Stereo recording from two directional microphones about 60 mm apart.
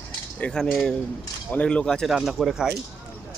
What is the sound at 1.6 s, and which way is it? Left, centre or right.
Speech, centre.